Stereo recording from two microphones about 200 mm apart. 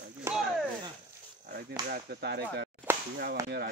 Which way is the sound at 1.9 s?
55° right (ahead or behind).